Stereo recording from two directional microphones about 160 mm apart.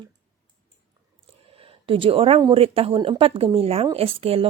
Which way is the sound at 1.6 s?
35° right (ahead or behind).